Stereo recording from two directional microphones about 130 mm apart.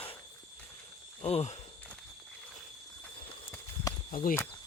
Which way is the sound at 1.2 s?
55° left (ahead or behind).